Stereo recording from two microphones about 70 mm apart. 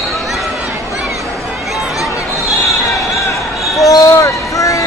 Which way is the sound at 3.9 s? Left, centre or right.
Left.